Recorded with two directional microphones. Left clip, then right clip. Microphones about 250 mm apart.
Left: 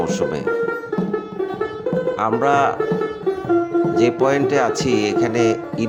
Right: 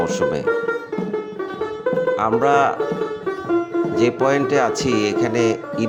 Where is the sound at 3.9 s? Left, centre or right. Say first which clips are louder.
Even; centre.